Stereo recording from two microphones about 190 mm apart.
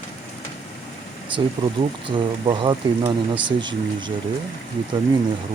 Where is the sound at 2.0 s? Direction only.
25° right (ahead or behind).